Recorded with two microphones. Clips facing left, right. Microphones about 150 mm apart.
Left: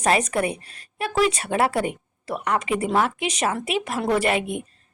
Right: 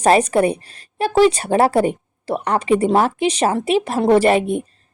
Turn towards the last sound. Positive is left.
turn(degrees=-35)  # may be behind; listen again after turning